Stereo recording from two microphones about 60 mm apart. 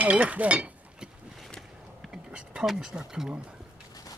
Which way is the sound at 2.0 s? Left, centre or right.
Centre.